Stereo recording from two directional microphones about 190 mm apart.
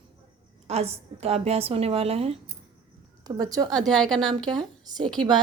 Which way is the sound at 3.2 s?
20° right (ahead or behind).